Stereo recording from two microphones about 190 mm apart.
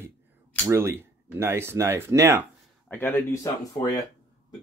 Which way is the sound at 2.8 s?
10° left (ahead or behind).